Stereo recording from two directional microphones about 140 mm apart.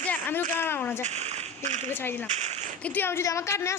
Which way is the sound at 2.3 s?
55° right (ahead or behind).